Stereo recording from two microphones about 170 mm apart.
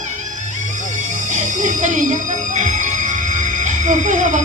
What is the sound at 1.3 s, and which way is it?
Music, 45° right (ahead or behind).